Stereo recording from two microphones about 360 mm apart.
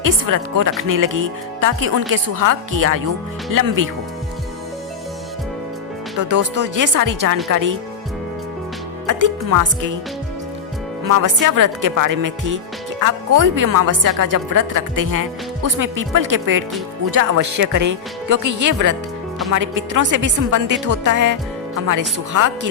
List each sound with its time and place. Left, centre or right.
0.0 s speech: right
6.5 s speech: right
9.0 s speech: right
11.0 s speech: right